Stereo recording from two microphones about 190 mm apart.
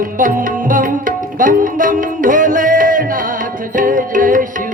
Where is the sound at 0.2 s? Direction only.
45° right (ahead or behind).